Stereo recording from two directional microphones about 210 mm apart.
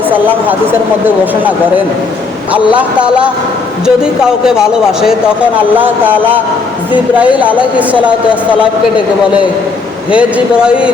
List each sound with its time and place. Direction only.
0.1 s speech: 10° right (ahead or behind)
7.3 s speech: 5° right (ahead or behind)
10.2 s speech: 5° right (ahead or behind)